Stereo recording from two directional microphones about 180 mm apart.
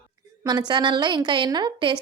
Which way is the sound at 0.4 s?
25° right (ahead or behind).